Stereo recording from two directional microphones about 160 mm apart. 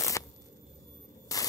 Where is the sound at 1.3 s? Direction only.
20° left (ahead or behind).